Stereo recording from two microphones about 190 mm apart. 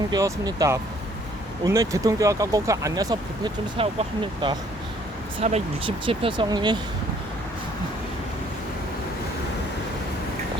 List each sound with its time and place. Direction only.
0.1 s speech: 20° right (ahead or behind)